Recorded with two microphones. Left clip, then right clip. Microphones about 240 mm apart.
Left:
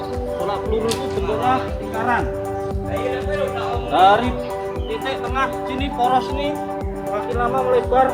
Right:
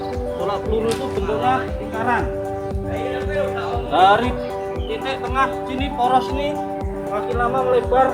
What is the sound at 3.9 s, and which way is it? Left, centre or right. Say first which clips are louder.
Speech: even; centre.